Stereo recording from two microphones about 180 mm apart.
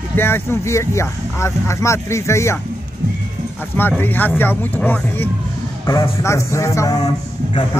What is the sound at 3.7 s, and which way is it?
Speech, 10° left (ahead or behind).